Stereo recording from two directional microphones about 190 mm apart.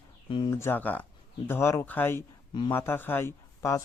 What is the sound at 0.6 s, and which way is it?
A man's voice, 10° left (ahead or behind).